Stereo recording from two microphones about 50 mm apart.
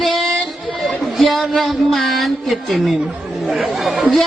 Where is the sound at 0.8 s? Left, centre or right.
Centre.